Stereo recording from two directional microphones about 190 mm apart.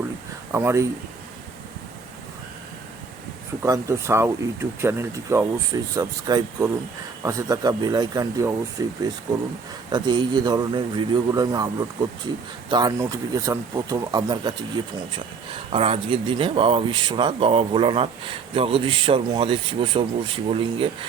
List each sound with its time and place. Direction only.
0.5 s speech: 15° right (ahead or behind)
3.6 s speech: 15° right (ahead or behind)
9.9 s speech: 25° right (ahead or behind)